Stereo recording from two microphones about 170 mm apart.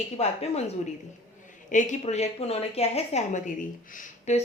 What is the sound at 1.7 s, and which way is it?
A woman's voice, 45° left (ahead or behind).